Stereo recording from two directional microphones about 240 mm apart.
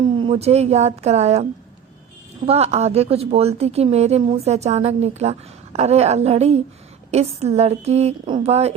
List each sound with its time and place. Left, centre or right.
0.2 s a woman's voice: right
2.5 s a woman's voice: right